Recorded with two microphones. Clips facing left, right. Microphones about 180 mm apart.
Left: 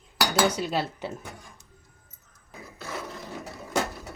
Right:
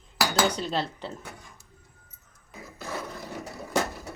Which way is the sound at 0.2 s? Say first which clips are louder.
Left 1 dB; 5° left (ahead or behind).